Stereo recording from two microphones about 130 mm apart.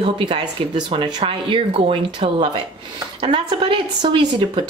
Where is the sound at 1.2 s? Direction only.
45° right (ahead or behind).